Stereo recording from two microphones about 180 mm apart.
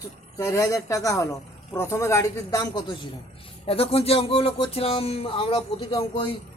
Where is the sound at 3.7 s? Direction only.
35° left (ahead or behind).